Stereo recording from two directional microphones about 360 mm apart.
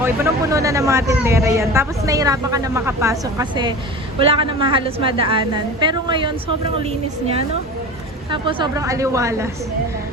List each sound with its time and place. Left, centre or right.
0.0 s speech: centre